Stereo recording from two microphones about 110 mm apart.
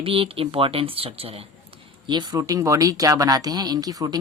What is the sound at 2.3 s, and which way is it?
Speech, 30° right (ahead or behind).